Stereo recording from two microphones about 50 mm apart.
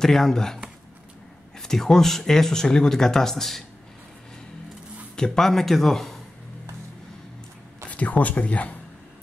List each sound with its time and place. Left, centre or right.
0.0 s speech: centre
1.6 s speech: centre
5.1 s speech: centre
7.9 s speech: left